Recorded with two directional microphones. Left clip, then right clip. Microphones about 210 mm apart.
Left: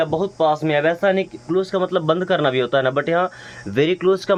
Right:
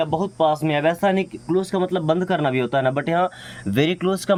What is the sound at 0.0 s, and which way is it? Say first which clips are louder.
Speech: left 1 dB; 30° right (ahead or behind).